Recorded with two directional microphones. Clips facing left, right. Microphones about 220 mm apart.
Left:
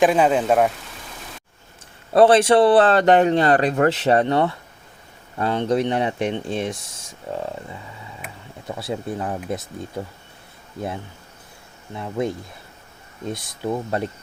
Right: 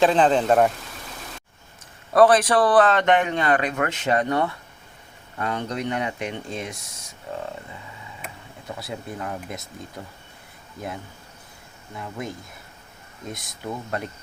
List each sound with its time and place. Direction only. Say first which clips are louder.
0.0 s speech: left 1 dB; 10° left (ahead or behind)
2.1 s a man's voice: left 3 dB; 25° left (ahead or behind)
8.9 s a man's voice: left 6 dB; 30° left (ahead or behind)
11.9 s speech: left 8 dB; 25° left (ahead or behind)
13.3 s speech: left 7 dB; 25° left (ahead or behind)